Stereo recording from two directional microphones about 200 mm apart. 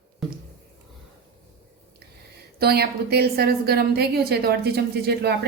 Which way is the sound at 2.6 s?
50° right (ahead or behind).